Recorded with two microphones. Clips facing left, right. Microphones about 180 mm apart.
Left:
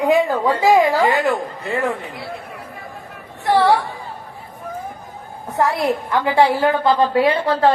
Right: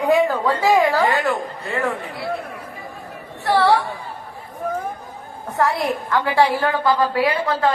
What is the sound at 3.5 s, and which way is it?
Speech, 20° left (ahead or behind).